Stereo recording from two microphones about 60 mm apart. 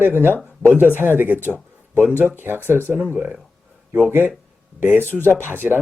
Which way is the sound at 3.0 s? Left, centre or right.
Right.